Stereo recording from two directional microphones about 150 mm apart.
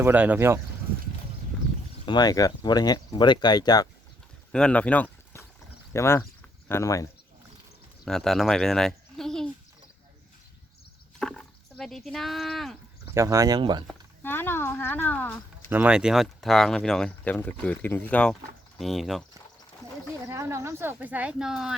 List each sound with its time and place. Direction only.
0.0 s speech: 10° right (ahead or behind)
2.0 s speech: 30° left (ahead or behind)
4.5 s speech: 5° left (ahead or behind)
8.0 s speech: centre (ahead or behind)
11.2 s speech: 5° left (ahead or behind)
13.1 s speech: 20° right (ahead or behind)
14.2 s speech: 15° left (ahead or behind)
15.7 s speech: 10° right (ahead or behind)
20.2 s speech: 20° right (ahead or behind); by 21.8 s centre (ahead or behind)